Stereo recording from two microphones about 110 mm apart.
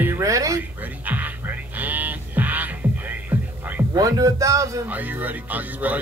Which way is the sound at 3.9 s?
35° right (ahead or behind).